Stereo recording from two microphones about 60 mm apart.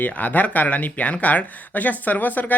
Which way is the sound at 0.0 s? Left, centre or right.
Left.